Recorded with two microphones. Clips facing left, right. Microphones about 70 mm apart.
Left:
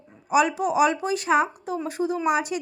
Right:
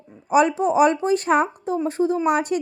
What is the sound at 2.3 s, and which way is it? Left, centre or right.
Speech, right.